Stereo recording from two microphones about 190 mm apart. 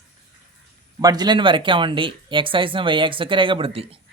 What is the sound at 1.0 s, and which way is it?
Speech, 20° right (ahead or behind).